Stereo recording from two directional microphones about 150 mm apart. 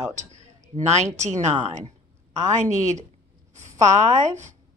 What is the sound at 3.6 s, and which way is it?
Speech, 55° right (ahead or behind).